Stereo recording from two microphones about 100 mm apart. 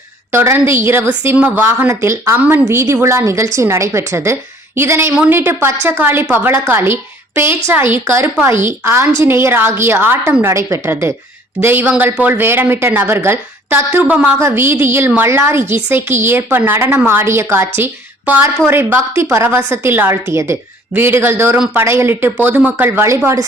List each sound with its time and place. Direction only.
0.3 s speech: 25° right (ahead or behind)
1.9 s speech: 30° right (ahead or behind)
14.3 s speech: 25° right (ahead or behind)